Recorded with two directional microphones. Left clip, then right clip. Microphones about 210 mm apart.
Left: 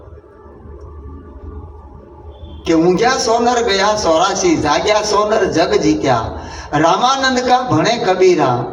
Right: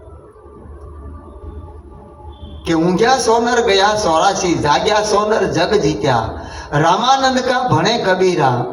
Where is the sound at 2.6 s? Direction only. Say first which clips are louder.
Left 1 dB; 30° left (ahead or behind).